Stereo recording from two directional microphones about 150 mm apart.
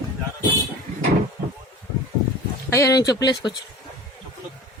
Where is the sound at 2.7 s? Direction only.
20° left (ahead or behind).